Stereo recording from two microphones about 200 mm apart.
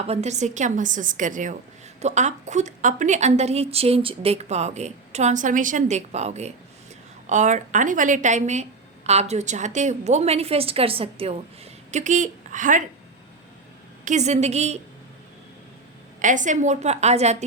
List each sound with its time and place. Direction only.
0.0 s a woman's voice: 30° right (ahead or behind)
14.0 s a woman's voice: 35° right (ahead or behind)
16.2 s a woman's voice: 40° right (ahead or behind)